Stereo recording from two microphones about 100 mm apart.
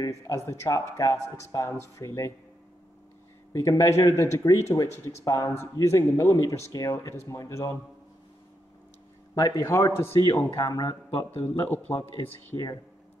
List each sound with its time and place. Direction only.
0.0 s speech: 35° left (ahead or behind)
3.5 s speech: 35° left (ahead or behind)
9.3 s speech: 35° left (ahead or behind)
10.7 s speech: 40° left (ahead or behind)
12.5 s speech: 50° left (ahead or behind)